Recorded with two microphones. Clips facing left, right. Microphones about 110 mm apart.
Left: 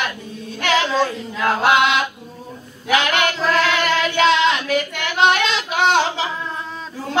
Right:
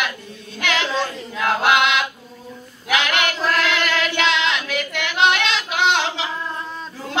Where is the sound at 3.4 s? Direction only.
Centre (ahead or behind).